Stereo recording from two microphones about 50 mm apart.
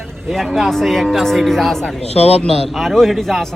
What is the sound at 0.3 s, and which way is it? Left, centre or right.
Speech, centre.